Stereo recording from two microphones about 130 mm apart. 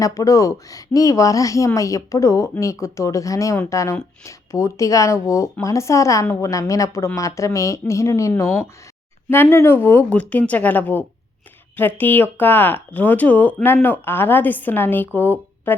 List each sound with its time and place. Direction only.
0.0 s speech: 25° left (ahead or behind)